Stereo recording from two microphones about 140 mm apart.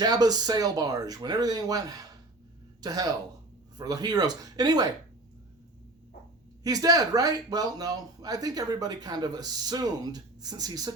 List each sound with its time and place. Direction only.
0.0 s speech: 30° right (ahead or behind)
6.6 s speech: 25° right (ahead or behind)